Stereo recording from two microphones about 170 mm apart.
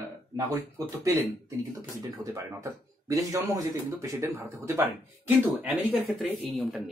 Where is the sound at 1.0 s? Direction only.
20° right (ahead or behind).